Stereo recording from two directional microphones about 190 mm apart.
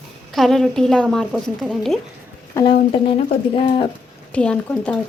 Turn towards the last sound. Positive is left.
turn(degrees=5)  # may be behind; listen again after turning